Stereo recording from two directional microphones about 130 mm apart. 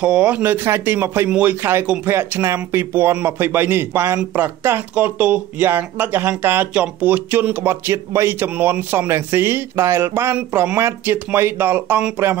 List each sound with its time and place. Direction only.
0.0 s speech: 10° right (ahead or behind)